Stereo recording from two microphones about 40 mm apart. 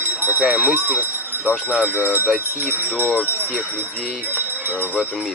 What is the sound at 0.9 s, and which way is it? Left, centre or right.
Jingle bell, right.